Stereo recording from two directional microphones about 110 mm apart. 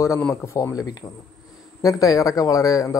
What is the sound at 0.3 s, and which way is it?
A man's voice, 25° left (ahead or behind).